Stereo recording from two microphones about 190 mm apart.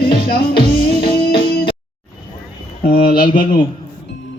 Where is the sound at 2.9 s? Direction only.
55° left (ahead or behind).